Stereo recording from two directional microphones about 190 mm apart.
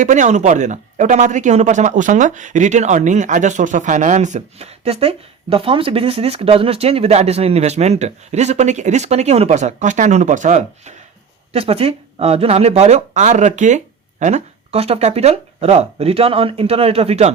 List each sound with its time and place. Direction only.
0.0 s speech: 40° right (ahead or behind)